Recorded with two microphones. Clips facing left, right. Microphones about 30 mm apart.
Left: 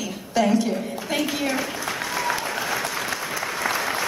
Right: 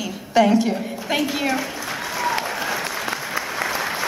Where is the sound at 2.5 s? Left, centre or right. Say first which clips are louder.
Right 1 dB; centre.